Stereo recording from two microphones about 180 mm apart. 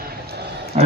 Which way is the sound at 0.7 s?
40° right (ahead or behind).